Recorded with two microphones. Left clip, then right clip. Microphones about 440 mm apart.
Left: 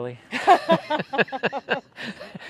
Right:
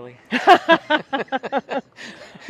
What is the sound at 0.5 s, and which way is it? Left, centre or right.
Speech, right.